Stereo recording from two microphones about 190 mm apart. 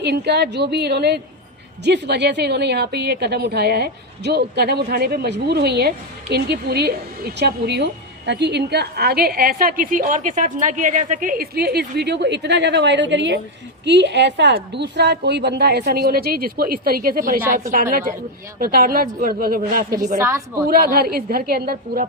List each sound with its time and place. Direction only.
0.0 s a woman's voice: 60° right (ahead or behind)
18.6 s a woman's voice: 50° right (ahead or behind)
20.1 s a woman's voice: 15° right (ahead or behind)
20.7 s a woman's voice: 50° right (ahead or behind)